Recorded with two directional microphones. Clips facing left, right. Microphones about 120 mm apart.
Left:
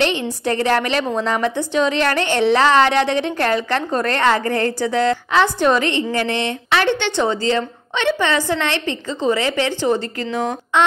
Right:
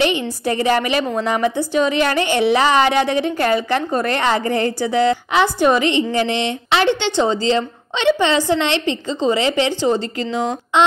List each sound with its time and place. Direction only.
0.0 s a woman's voice: 10° right (ahead or behind)